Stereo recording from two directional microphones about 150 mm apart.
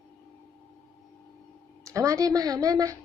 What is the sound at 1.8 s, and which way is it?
A woman's voice, 20° right (ahead or behind).